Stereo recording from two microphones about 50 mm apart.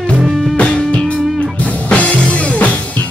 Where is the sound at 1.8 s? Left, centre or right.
Left.